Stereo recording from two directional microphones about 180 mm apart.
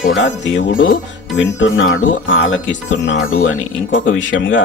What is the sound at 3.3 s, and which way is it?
Speech, 90° left.